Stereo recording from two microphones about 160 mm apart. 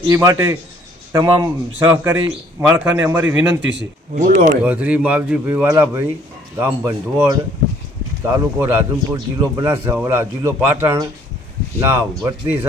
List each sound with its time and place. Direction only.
0.1 s a man's voice: 20° right (ahead or behind)
4.2 s speech: 60° right (ahead or behind)
4.6 s a man's voice: 10° right (ahead or behind)